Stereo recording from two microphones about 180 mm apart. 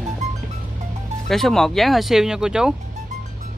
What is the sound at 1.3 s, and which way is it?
Speech, centre (ahead or behind).